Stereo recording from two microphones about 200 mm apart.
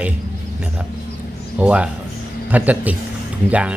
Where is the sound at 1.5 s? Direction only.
5° right (ahead or behind).